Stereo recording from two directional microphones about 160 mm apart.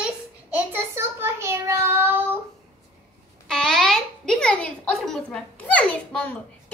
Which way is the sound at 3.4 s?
5° left (ahead or behind).